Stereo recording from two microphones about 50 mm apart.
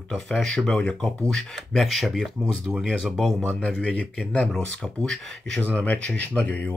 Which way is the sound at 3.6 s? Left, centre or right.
Left.